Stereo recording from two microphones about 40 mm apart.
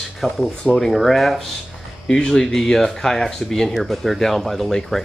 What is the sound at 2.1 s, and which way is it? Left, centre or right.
Speech, centre.